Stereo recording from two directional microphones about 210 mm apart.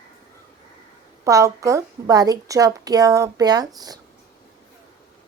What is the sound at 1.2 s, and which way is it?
A woman's voice, 15° right (ahead or behind).